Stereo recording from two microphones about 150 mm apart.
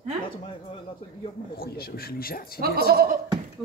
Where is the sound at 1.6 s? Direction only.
90° left.